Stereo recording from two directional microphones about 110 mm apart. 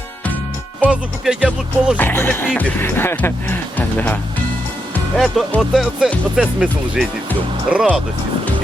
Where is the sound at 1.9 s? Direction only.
20° left (ahead or behind).